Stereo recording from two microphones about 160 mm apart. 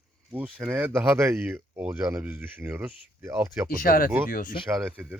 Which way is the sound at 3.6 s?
65° left (ahead or behind).